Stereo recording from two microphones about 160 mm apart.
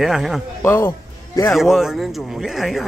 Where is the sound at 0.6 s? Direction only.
15° left (ahead or behind).